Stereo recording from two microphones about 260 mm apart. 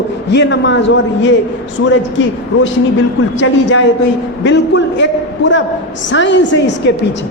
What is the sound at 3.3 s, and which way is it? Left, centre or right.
A man's voice, left.